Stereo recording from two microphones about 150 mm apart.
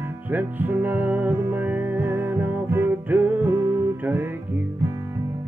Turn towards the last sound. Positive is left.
turn(degrees=-20)  # may be behind; listen again after turning